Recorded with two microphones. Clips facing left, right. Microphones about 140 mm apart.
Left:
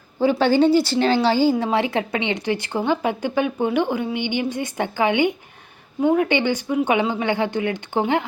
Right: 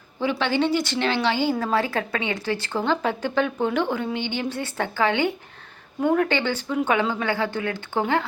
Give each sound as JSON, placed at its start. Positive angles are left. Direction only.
{"t": 0.2, "sound": "a woman's voice", "side_deg": 40}
{"t": 1.5, "sound": "speech", "side_deg": 25}